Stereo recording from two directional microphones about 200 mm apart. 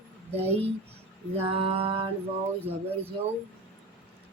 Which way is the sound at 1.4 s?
30° right (ahead or behind).